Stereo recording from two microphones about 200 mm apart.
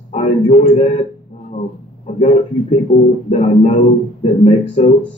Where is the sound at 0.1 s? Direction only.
35° left (ahead or behind).